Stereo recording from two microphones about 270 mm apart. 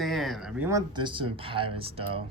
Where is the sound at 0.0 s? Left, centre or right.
Centre.